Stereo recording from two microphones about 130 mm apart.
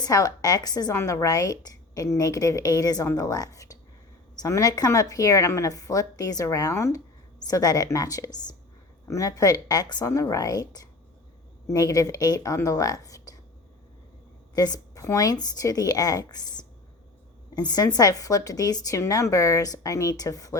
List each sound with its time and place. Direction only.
0.0 s a woman's voice: 25° left (ahead or behind)
14.5 s a woman's voice: 30° left (ahead or behind)